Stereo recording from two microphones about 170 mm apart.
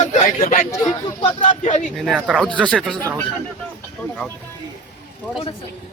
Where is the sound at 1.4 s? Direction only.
45° left (ahead or behind).